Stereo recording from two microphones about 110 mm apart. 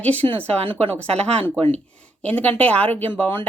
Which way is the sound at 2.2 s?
15° left (ahead or behind).